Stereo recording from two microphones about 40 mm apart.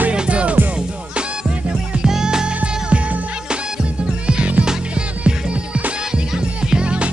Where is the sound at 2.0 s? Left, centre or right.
Centre.